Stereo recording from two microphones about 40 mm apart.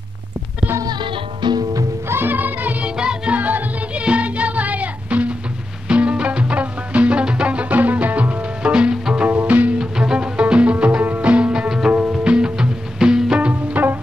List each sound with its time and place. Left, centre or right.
2.0 s music: right
2.3 s music: right
2.8 s music: right
3.3 s music: right
4.0 s music: right
7.7 s music: right
9.3 s music: right
9.8 s music: right
10.4 s music: right
13.5 s music: right